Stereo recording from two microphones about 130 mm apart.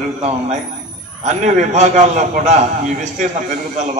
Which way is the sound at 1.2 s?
65° right (ahead or behind).